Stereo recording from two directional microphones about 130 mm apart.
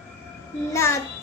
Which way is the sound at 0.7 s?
20° left (ahead or behind).